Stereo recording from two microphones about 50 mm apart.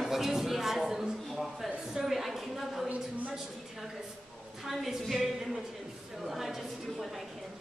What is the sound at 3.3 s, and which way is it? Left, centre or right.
A woman's voice, centre.